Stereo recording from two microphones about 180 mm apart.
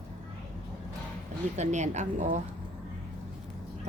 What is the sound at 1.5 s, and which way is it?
Speech, 40° right (ahead or behind).